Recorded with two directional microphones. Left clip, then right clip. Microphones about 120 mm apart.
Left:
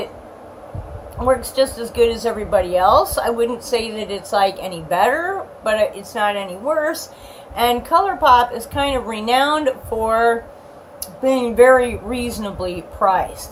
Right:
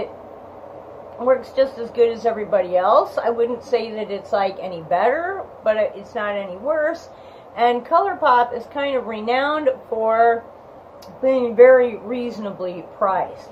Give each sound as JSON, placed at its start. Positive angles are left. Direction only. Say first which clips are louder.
{"t": 1.2, "sound": "speech", "louder": "left 1 dB", "side_deg": 35}
{"t": 7.5, "sound": "speech", "louder": "left 1 dB", "side_deg": 30}